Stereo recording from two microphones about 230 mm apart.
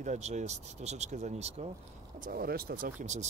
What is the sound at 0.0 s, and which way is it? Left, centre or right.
Speech, right.